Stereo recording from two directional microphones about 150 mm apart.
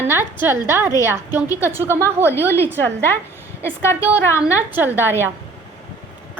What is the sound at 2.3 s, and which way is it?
Speech, 15° left (ahead or behind).